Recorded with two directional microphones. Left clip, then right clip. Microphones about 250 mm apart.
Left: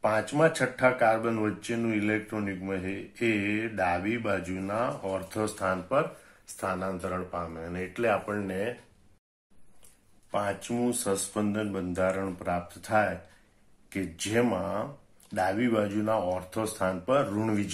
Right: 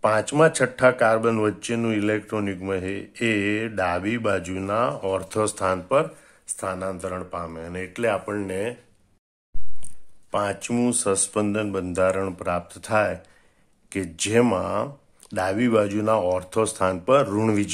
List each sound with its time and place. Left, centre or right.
0.0 s speech: right
10.3 s speech: right